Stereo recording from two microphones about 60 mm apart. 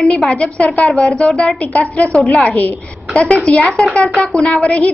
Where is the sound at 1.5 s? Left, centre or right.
Left.